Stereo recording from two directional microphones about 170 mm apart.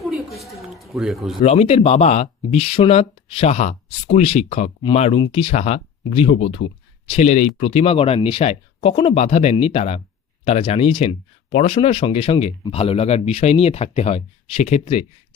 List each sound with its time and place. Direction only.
0.0 s a sound: centre (ahead or behind)
0.8 s speech: centre (ahead or behind)
1.4 s speech: 40° left (ahead or behind)